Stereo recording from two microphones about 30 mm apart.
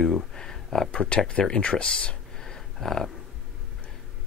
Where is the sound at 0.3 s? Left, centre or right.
Centre.